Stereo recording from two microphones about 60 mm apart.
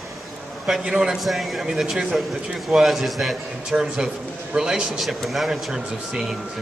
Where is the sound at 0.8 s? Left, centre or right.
Centre.